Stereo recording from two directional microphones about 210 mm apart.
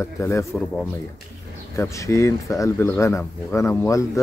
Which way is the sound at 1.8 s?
15° left (ahead or behind).